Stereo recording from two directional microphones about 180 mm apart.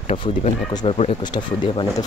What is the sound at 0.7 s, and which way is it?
Speech, 25° left (ahead or behind).